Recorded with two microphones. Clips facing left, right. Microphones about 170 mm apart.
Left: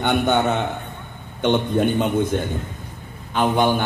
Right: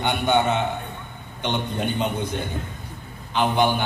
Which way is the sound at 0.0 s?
50° left (ahead or behind).